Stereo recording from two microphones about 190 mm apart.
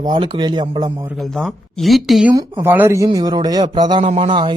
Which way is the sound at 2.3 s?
15° right (ahead or behind).